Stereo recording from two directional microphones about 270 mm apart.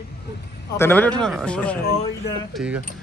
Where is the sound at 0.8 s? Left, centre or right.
Centre.